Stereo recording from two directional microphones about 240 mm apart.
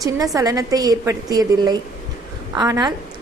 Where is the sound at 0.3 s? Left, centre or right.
Centre.